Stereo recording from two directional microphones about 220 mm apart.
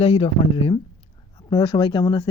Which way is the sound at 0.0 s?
25° left (ahead or behind).